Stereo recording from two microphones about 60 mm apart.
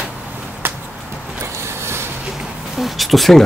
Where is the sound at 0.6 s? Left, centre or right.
Right.